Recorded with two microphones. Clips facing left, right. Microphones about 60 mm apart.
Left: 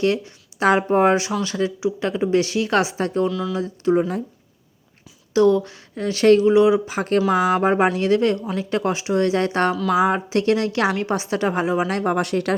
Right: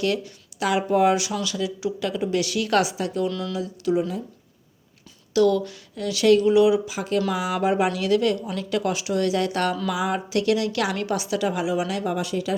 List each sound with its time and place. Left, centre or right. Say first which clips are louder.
0.0 s a woman's voice: left 4 dB; left
3.2 s speech: left 4 dB; centre
3.5 s a woman's voice: left 4 dB; left
5.3 s a woman's voice: left 3 dB; left